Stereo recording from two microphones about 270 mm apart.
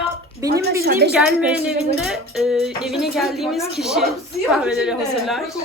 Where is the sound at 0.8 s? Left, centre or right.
Right.